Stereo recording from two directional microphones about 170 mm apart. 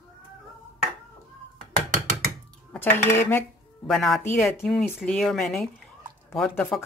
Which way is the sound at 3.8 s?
Centre (ahead or behind).